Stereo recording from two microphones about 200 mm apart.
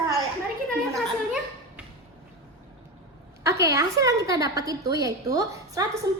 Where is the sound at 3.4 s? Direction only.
15° right (ahead or behind).